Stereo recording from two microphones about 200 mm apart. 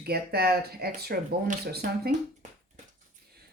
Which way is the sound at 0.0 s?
55° right (ahead or behind).